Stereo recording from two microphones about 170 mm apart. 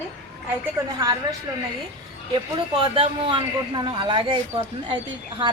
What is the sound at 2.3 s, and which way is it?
A man's voice, 30° right (ahead or behind).